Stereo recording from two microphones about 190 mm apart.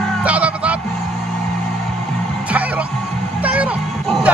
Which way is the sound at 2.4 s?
5° right (ahead or behind).